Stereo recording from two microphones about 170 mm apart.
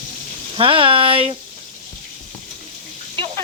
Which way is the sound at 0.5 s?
30° right (ahead or behind).